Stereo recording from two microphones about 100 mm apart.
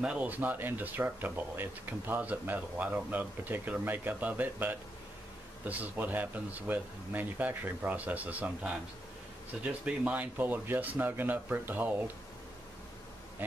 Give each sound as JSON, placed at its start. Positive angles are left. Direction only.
{"t": 0.0, "sound": "speech", "side_deg": -15}